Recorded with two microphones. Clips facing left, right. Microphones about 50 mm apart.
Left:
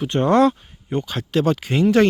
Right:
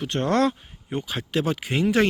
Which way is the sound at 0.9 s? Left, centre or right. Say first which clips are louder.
Left 4 dB; centre.